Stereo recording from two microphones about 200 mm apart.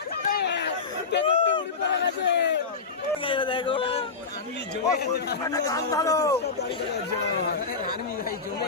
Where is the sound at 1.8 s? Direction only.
60° left (ahead or behind).